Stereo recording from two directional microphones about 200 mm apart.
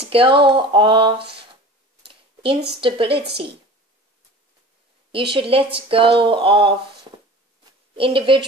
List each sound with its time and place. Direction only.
0.0 s speech: 25° right (ahead or behind)
2.0 s a sound: 25° right (ahead or behind)
2.8 s speech: 25° right (ahead or behind)
5.3 s speech: 25° right (ahead or behind)
7.9 s speech: 25° right (ahead or behind)